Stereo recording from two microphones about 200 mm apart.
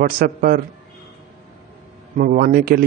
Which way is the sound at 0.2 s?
45° right (ahead or behind).